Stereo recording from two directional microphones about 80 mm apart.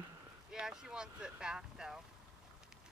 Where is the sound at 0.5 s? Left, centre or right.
Centre.